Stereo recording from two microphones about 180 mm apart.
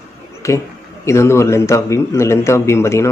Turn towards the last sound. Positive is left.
turn(degrees=15)  # may be behind; listen again after turning